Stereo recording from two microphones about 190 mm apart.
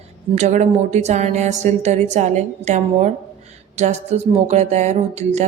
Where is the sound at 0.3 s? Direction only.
40° right (ahead or behind).